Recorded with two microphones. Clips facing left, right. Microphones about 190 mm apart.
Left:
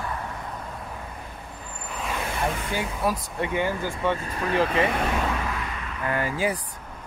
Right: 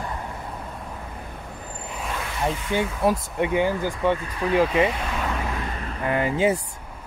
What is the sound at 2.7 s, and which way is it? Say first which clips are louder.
Speech: right 4 dB; 25° right (ahead or behind).